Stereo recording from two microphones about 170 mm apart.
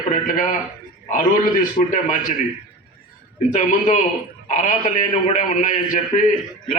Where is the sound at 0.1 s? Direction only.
45° left (ahead or behind).